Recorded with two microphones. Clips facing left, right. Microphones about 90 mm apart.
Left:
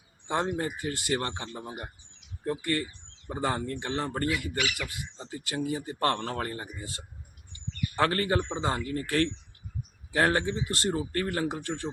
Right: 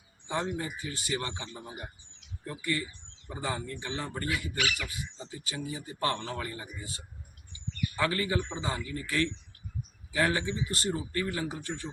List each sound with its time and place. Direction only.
0.3 s speech: 50° left (ahead or behind)